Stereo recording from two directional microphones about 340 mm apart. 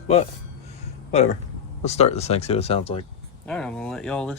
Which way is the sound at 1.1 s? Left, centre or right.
Centre.